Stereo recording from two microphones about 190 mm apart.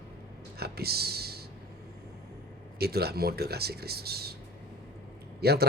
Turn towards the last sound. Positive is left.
turn(degrees=-55)  # may be behind; listen again after turning